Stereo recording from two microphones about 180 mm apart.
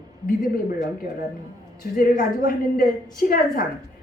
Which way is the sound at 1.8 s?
55° left (ahead or behind).